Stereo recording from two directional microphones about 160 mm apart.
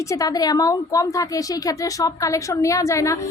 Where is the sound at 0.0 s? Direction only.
20° left (ahead or behind).